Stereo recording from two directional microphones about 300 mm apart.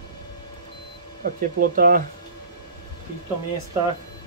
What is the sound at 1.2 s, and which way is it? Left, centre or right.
Speech, right.